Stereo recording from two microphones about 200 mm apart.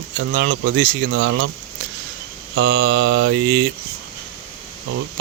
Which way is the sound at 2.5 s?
70° right (ahead or behind).